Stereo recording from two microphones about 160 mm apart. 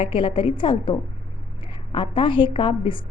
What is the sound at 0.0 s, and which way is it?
A woman's voice, 35° left (ahead or behind).